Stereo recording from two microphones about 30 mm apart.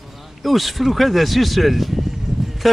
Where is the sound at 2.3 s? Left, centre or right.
Centre.